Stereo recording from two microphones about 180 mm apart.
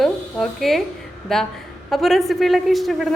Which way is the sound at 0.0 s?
Centre (ahead or behind).